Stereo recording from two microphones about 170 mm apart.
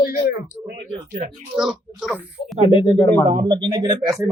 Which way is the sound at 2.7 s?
25° left (ahead or behind).